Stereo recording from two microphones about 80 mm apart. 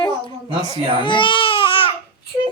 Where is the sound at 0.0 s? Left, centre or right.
Left.